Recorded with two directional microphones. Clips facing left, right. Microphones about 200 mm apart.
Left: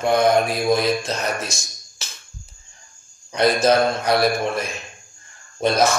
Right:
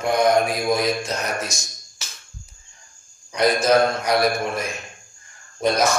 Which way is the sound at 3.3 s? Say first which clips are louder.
Left 1 dB; 30° left (ahead or behind).